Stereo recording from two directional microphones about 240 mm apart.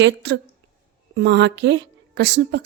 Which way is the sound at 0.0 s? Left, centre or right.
Right.